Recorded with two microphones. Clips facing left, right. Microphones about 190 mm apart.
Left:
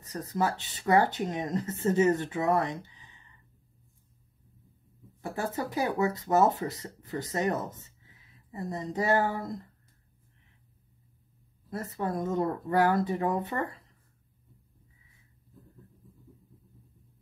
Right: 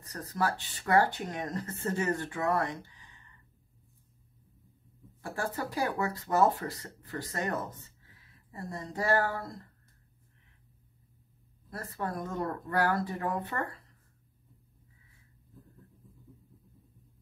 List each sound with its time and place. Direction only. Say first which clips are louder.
0.0 s speech: left 2 dB; 20° left (ahead or behind)
5.2 s speech: left 2 dB; 20° left (ahead or behind)
8.0 s a sound: left 1 dB; 20° left (ahead or behind)
8.9 s speech: left 2 dB; 20° left (ahead or behind)
11.7 s speech: left 4 dB; 20° left (ahead or behind)